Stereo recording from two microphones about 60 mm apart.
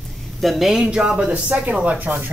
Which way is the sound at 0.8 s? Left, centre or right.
Centre.